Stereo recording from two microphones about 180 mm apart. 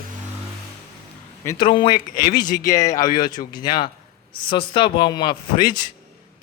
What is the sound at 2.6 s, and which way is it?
A man's voice, 15° left (ahead or behind).